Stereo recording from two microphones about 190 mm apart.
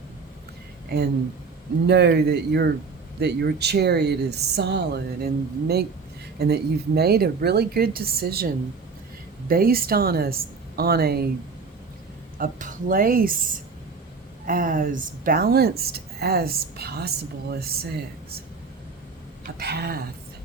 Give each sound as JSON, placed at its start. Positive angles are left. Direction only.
{"t": 1.9, "sound": "speech", "side_deg": -60}
{"t": 12.4, "sound": "speech", "side_deg": -45}
{"t": 19.5, "sound": "speech", "side_deg": -60}